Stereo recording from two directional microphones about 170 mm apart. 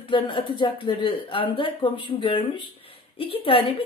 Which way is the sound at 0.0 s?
30° left (ahead or behind).